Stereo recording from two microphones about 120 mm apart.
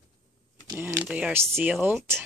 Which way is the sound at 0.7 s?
15° right (ahead or behind).